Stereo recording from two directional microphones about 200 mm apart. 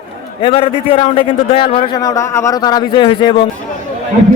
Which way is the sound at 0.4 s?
30° left (ahead or behind).